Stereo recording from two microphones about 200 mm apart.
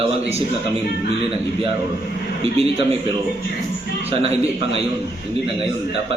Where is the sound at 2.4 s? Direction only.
30° right (ahead or behind).